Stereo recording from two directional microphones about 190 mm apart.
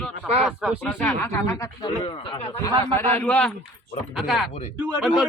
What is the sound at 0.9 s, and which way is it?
Speech, 10° left (ahead or behind).